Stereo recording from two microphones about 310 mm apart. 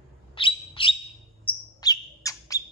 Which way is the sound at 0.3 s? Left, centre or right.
Centre.